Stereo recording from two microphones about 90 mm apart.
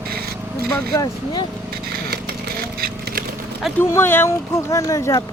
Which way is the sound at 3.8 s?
25° left (ahead or behind).